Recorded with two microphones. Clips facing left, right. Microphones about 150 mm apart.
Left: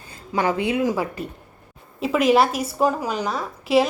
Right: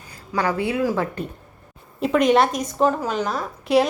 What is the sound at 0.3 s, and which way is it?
Speech, 20° left (ahead or behind).